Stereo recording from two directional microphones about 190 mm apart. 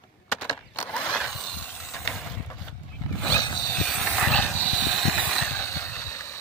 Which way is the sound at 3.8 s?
5° left (ahead or behind).